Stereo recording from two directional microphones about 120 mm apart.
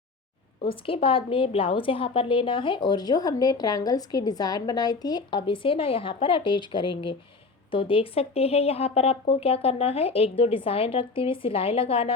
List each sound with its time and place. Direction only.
0.7 s a woman's voice: 50° left (ahead or behind)